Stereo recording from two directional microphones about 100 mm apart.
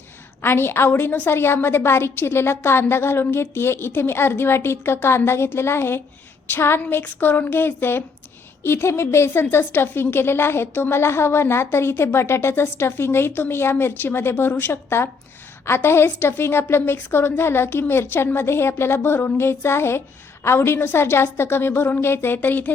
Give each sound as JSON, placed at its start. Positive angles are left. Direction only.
{"t": 0.4, "sound": "a woman's voice", "side_deg": 20}